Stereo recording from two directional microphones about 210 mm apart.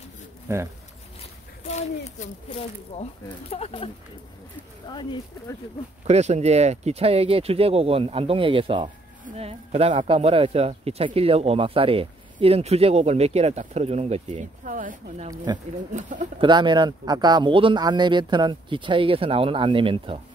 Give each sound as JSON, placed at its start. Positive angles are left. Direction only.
{"t": 0.5, "sound": "speech", "side_deg": -15}
{"t": 1.6, "sound": "speech", "side_deg": 30}
{"t": 6.0, "sound": "speech", "side_deg": -30}
{"t": 15.2, "sound": "speech", "side_deg": -20}
{"t": 15.9, "sound": "speech", "side_deg": -35}
{"t": 16.3, "sound": "speech", "side_deg": -20}